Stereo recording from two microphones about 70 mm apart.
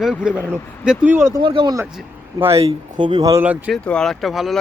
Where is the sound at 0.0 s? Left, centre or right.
Centre.